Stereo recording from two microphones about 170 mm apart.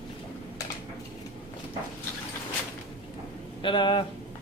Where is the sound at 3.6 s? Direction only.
30° left (ahead or behind).